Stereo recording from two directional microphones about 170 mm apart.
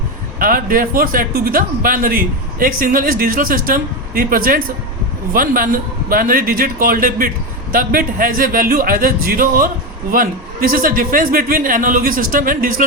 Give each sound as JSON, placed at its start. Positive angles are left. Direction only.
{"t": 0.3, "sound": "speech", "side_deg": -55}